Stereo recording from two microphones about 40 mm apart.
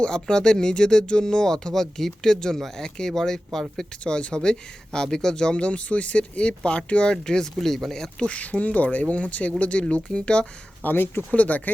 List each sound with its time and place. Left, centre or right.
0.0 s speech: left
4.0 s speech: left
7.5 s speech: centre
8.2 s speech: left
10.8 s speech: left
11.3 s speech: left